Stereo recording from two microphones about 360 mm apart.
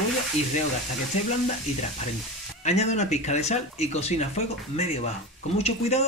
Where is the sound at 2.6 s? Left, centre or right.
Centre.